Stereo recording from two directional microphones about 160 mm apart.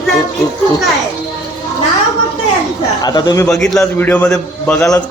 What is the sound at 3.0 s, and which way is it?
Speech, 25° left (ahead or behind).